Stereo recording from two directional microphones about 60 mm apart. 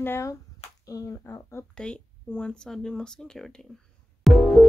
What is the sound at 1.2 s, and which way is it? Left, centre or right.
Speech, left.